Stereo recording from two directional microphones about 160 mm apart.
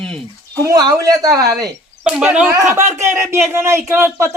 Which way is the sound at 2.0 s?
5° right (ahead or behind).